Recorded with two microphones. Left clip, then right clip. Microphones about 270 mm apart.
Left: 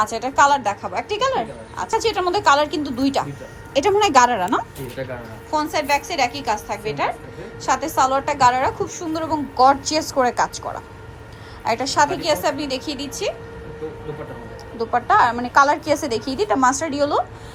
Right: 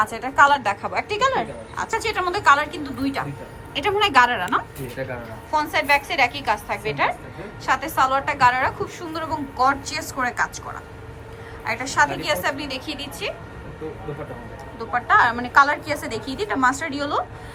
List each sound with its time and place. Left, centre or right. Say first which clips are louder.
0.0 s a woman's voice: even; centre
3.8 s a woman's voice: left 3 dB; left
11.6 s a woman's voice: left 2 dB; centre
12.5 s a woman's voice: left 4 dB; centre
12.8 s a woman's voice: left 4 dB; centre
14.8 s a woman's voice: left 2 dB; centre